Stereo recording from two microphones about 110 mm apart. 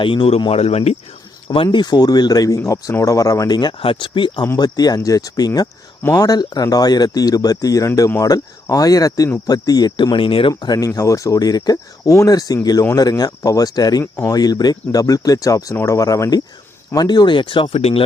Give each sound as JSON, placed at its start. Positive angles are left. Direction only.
{"t": 0.0, "sound": "speech", "side_deg": 50}
{"t": 1.5, "sound": "speech", "side_deg": 45}
{"t": 4.5, "sound": "speech", "side_deg": 35}
{"t": 10.6, "sound": "speech", "side_deg": 35}